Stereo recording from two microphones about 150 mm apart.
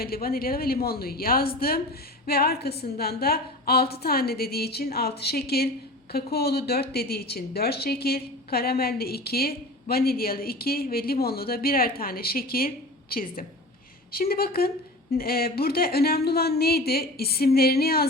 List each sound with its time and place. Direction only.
0.0 s a woman's voice: 90° left; by 13.4 s 75° left (ahead or behind)
14.1 s a woman's voice: 90° left